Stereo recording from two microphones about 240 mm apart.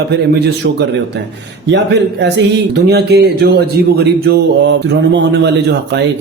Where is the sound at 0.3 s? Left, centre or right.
Right.